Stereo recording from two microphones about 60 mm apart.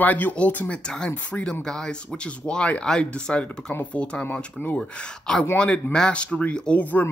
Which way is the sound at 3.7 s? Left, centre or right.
Left.